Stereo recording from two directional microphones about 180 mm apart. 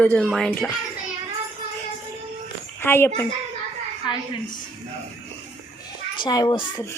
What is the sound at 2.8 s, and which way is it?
Speech, 15° left (ahead or behind).